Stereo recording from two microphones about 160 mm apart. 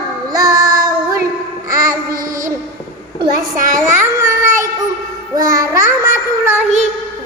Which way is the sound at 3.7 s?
20° right (ahead or behind).